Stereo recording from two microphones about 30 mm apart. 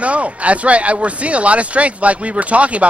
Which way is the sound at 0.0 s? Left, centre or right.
Right.